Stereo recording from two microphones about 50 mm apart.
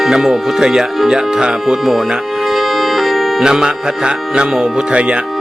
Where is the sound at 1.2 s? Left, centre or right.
Centre.